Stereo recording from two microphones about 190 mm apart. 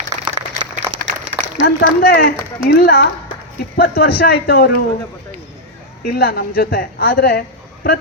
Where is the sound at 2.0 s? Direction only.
50° left (ahead or behind).